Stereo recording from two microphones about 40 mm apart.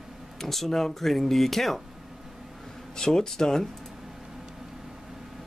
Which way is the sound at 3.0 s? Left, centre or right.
Centre.